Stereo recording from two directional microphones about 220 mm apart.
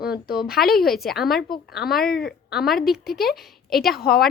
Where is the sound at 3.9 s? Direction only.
45° left (ahead or behind).